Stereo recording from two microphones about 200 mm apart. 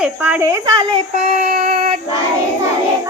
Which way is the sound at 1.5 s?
35° right (ahead or behind).